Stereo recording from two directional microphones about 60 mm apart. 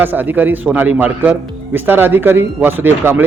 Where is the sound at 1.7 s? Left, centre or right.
Right.